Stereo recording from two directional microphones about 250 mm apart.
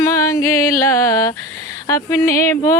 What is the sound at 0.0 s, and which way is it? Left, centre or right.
Music, centre.